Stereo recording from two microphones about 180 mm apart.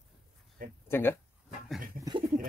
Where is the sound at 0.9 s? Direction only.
10° left (ahead or behind).